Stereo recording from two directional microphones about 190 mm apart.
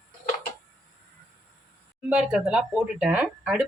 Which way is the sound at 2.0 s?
5° right (ahead or behind).